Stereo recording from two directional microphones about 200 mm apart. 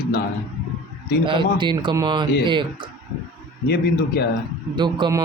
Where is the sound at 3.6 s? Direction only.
55° left (ahead or behind).